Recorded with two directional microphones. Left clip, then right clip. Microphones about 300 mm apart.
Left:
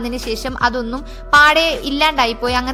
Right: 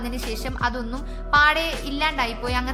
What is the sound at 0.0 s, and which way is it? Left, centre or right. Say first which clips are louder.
A woman's voice: left 7 dB; left.